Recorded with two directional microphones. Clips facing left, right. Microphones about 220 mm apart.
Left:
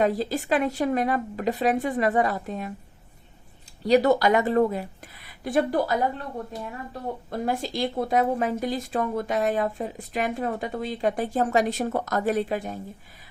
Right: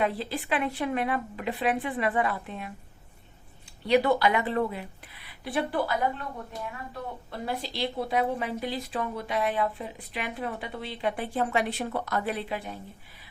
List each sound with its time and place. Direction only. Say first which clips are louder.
0.0 s speech: left 5 dB; 40° left (ahead or behind)
3.8 s a woman's voice: left 4 dB; 40° left (ahead or behind)
7.3 s a woman's voice: left 7 dB; 45° left (ahead or behind)